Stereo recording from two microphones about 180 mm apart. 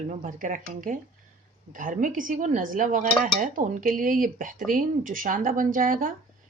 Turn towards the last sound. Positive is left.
turn(degrees=-50)  # may be behind; listen again after turning